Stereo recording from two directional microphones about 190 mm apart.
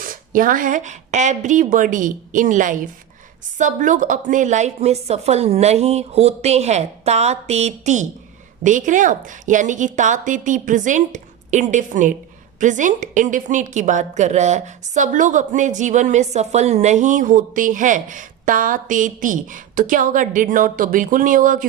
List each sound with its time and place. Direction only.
0.0 s a woman's voice: 45° right (ahead or behind)